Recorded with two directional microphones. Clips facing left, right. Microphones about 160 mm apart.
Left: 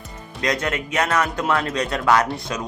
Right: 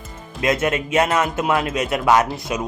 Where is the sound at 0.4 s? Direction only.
25° right (ahead or behind).